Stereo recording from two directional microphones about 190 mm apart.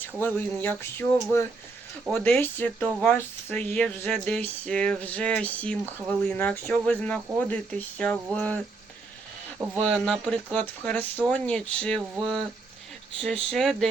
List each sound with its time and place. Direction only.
0.2 s speech: 10° left (ahead or behind)
9.8 s speech: 5° left (ahead or behind)